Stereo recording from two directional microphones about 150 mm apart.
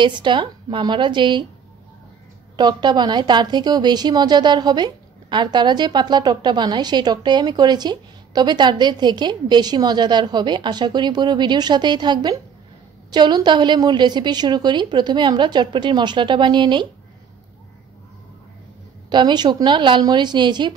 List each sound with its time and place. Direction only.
0.0 s a woman's voice: 30° right (ahead or behind)
2.5 s a woman's voice: 30° right (ahead or behind)
19.0 s a woman's voice: 30° right (ahead or behind)